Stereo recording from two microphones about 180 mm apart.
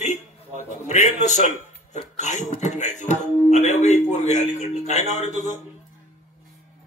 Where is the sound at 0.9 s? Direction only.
40° left (ahead or behind).